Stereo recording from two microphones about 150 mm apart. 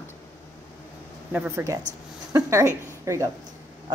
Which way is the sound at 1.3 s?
10° right (ahead or behind).